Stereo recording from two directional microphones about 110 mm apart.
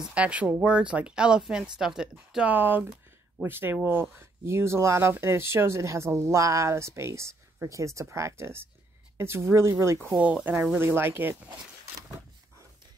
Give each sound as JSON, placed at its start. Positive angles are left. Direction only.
{"t": 0.1, "sound": "speech", "side_deg": -10}
{"t": 2.5, "sound": "speech", "side_deg": -15}
{"t": 10.1, "sound": "speech", "side_deg": -10}